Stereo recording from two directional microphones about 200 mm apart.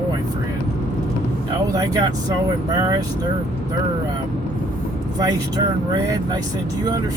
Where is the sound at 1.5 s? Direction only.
15° right (ahead or behind).